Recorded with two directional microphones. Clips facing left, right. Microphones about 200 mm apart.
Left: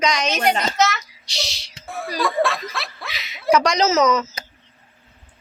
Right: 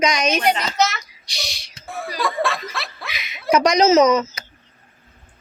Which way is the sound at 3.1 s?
15° right (ahead or behind).